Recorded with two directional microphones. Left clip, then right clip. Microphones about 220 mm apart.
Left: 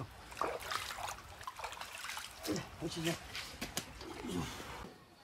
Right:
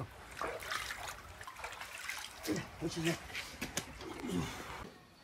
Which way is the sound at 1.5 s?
10° left (ahead or behind).